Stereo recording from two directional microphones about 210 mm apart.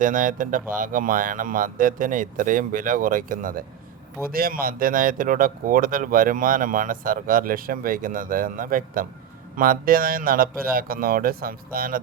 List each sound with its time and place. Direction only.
0.0 s speech: 40° right (ahead or behind)